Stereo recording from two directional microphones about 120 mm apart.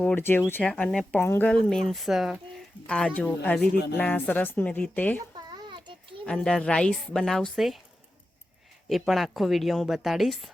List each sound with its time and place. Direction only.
0.0 s speech: 15° left (ahead or behind)
1.1 s speech: 20° left (ahead or behind)
1.5 s a woman's voice: 5° left (ahead or behind)
2.8 s speech: 10° left (ahead or behind)
5.3 s a sound: 40° right (ahead or behind)
6.2 s a woman's voice: 5° left (ahead or behind)
8.9 s a woman's voice: centre (ahead or behind)